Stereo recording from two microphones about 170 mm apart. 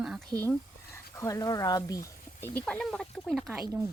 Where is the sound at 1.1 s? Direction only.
20° left (ahead or behind).